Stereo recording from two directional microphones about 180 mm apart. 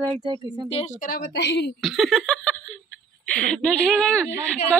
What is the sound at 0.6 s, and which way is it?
Speech, 35° left (ahead or behind).